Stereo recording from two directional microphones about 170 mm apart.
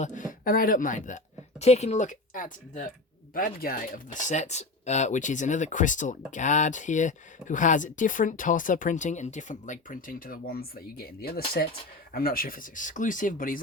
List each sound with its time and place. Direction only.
0.0 s speech: 50° left (ahead or behind)